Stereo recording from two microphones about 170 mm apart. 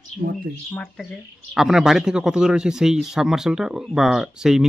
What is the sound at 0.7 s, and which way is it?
Speech, 5° left (ahead or behind).